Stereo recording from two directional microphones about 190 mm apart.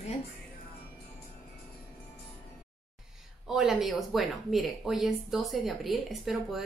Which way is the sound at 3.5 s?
Centre (ahead or behind).